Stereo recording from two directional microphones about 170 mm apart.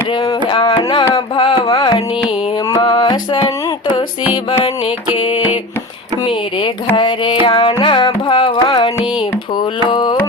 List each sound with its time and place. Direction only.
0.3 s music: 25° left (ahead or behind)
5.1 s mantra: 30° left (ahead or behind)
6.2 s carnatic music: 30° left (ahead or behind)
9.6 s a sound: 25° left (ahead or behind)